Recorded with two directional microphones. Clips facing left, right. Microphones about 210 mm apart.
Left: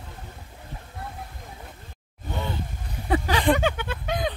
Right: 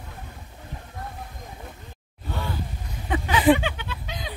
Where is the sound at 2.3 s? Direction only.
20° left (ahead or behind).